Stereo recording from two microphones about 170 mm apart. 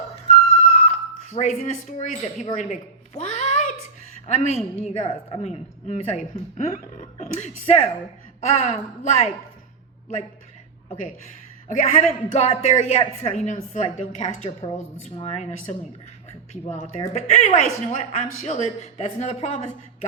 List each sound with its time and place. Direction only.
0.3 s a sound: 40° left (ahead or behind)
1.9 s speech: 45° left (ahead or behind)
3.2 s a sound: 45° left (ahead or behind)
4.3 s a woman's voice: 40° left (ahead or behind)
11.7 s speech: 45° left (ahead or behind)
16.5 s speech: 45° left (ahead or behind)